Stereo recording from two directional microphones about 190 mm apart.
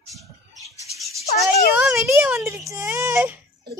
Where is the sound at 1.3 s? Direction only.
Centre (ahead or behind).